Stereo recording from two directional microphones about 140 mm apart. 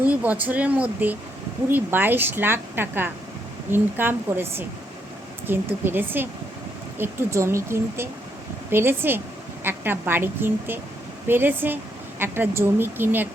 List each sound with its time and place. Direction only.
0.0 s speech: 10° right (ahead or behind)